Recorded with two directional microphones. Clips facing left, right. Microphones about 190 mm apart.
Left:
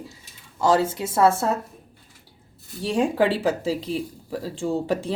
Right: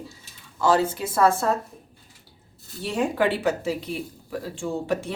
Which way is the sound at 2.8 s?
30° left (ahead or behind).